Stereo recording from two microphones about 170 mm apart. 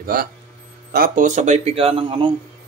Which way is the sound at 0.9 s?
55° right (ahead or behind).